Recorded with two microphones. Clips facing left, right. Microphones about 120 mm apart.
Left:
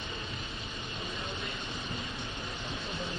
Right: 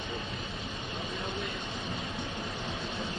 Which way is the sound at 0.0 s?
Centre (ahead or behind).